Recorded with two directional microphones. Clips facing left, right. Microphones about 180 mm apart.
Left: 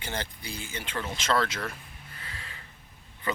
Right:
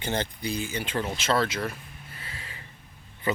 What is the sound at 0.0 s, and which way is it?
Speech, 20° right (ahead or behind).